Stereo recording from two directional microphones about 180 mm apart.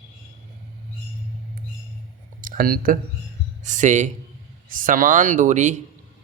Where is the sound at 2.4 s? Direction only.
50° right (ahead or behind).